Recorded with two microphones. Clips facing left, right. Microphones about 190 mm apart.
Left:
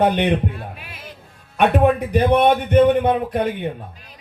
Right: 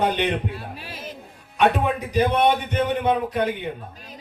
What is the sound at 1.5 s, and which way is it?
A man's voice, 55° left (ahead or behind).